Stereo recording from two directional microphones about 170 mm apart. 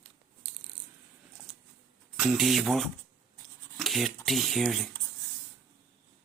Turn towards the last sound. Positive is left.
turn(degrees=0)  # may be behind; listen again after turning